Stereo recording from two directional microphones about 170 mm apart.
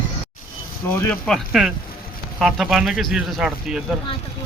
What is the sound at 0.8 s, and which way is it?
Speech, 10° left (ahead or behind).